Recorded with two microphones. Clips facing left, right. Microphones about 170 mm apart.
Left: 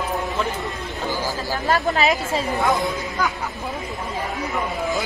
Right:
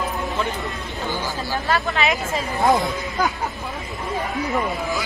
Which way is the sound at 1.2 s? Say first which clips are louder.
Left 1 dB; 40° left (ahead or behind).